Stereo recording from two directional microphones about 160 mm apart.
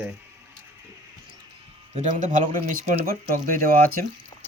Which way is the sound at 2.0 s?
50° right (ahead or behind).